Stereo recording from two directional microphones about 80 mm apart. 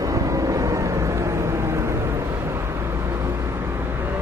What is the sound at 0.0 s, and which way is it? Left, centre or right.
Vehicle, right.